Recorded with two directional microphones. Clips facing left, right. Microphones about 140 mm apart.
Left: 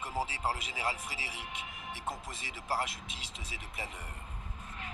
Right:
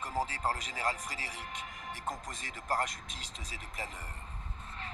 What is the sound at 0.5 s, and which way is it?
A man's voice, 40° right (ahead or behind).